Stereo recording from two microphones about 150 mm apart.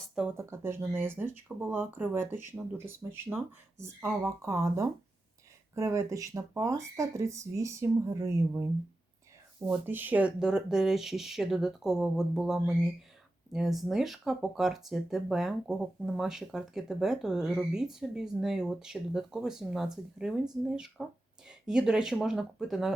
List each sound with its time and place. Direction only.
0.3 s speech: 15° right (ahead or behind)